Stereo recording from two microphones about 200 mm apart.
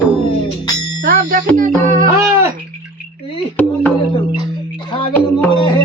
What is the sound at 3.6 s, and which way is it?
Speech, 5° left (ahead or behind).